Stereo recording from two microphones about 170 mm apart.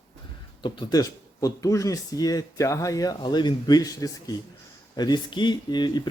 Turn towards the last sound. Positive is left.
turn(degrees=25)  # may be behind; listen again after turning